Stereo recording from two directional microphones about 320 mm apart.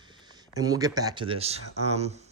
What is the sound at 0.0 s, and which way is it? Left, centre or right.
Speech, centre.